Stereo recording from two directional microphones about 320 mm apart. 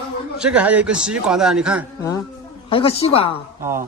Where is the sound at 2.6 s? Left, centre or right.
Centre.